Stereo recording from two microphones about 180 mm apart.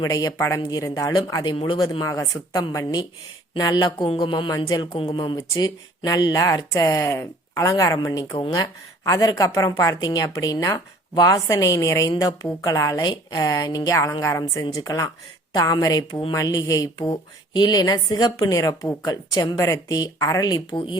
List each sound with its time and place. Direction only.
0.0 s a woman's voice: 20° left (ahead or behind)